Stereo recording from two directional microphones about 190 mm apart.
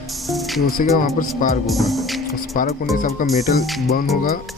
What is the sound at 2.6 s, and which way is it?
Speech, 45° left (ahead or behind).